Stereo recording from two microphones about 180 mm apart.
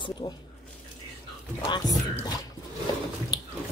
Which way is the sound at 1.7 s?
25° left (ahead or behind).